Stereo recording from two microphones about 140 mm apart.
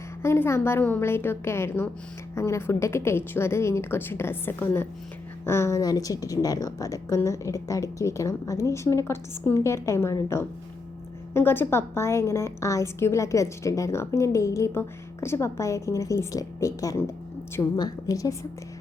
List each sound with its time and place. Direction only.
0.2 s a woman's voice: 20° left (ahead or behind)